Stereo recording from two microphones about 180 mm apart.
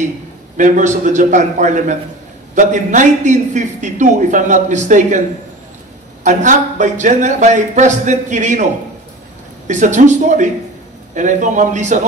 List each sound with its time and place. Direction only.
0.6 s a man's voice: 45° right (ahead or behind)
6.2 s a man's voice: 45° right (ahead or behind)
9.7 s a man's voice: 40° right (ahead or behind)